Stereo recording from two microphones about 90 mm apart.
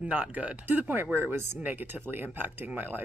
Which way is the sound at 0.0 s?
15° right (ahead or behind).